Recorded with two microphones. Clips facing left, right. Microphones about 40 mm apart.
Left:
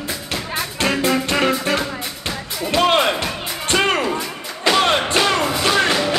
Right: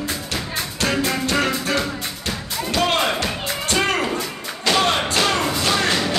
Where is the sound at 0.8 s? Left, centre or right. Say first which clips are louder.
Left 3 dB; left.